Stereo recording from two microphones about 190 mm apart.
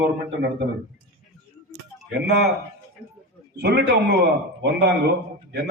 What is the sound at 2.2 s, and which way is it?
Speech, 60° right (ahead or behind).